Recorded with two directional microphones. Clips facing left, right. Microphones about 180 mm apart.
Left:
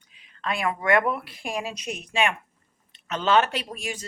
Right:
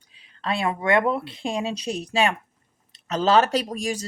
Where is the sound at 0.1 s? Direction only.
30° right (ahead or behind).